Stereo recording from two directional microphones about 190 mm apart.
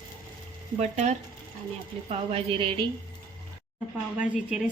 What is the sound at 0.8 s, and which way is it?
A woman's voice, 35° right (ahead or behind).